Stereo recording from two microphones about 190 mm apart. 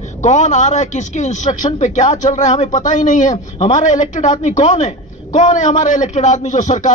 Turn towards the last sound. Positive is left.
turn(degrees=40)  # may be behind; listen again after turning